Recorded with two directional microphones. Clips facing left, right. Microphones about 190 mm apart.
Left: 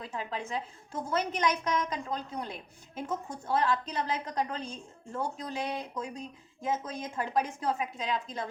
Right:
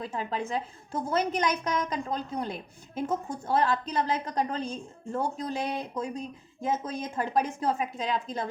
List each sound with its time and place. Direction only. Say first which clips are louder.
0.0 s a woman's voice: right 5 dB; 35° right (ahead or behind)